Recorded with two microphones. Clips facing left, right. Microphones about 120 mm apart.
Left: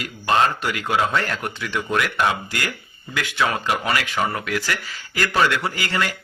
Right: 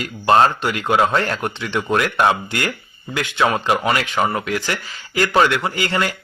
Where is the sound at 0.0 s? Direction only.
35° right (ahead or behind).